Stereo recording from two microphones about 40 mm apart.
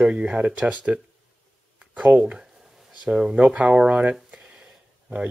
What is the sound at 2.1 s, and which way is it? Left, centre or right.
Speech, right.